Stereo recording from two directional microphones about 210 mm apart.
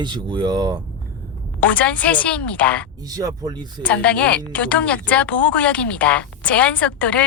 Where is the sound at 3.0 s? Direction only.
15° right (ahead or behind).